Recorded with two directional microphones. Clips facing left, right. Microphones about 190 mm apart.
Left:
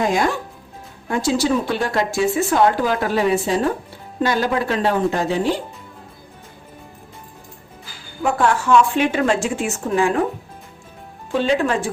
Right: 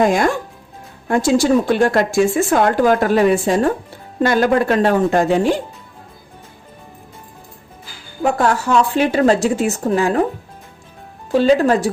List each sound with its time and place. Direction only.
0.0 s speech: 50° right (ahead or behind)
8.2 s a woman's voice: 40° right (ahead or behind)
11.3 s a woman's voice: 40° right (ahead or behind)